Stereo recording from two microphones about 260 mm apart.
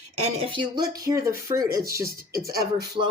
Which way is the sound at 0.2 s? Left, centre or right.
Right.